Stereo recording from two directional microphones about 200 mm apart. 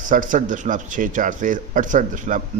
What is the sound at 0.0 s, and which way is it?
A man's voice, 40° right (ahead or behind).